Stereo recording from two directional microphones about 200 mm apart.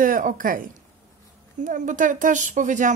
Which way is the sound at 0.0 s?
45° right (ahead or behind).